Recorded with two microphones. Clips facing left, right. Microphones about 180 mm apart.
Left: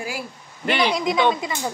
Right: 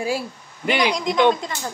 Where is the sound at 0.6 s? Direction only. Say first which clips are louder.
Right 1 dB; 15° right (ahead or behind).